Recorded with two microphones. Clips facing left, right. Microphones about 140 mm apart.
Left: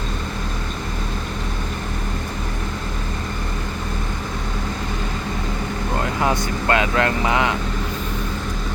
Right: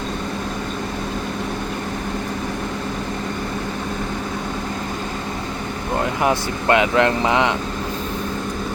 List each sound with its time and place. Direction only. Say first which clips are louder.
6.2 s speech: right 2 dB; 20° right (ahead or behind)